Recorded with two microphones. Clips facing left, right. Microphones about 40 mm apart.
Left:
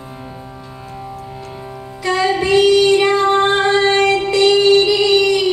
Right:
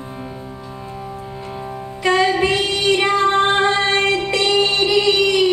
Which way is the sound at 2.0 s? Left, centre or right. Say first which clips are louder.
Even; right.